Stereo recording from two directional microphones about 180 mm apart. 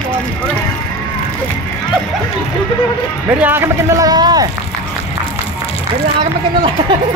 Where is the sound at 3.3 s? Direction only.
10° right (ahead or behind).